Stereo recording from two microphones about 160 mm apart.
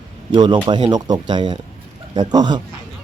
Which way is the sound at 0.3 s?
30° right (ahead or behind).